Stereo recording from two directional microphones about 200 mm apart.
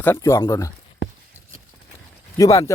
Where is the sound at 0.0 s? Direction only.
10° left (ahead or behind).